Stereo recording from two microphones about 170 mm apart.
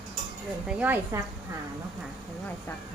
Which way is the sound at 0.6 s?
10° right (ahead or behind).